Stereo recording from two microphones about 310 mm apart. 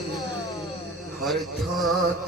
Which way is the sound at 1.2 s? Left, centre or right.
Centre.